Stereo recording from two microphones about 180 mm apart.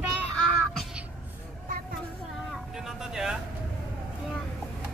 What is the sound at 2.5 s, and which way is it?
Vehicle, centre (ahead or behind).